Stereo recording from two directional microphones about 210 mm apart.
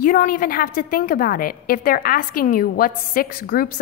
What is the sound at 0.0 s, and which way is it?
A woman's voice, 40° left (ahead or behind).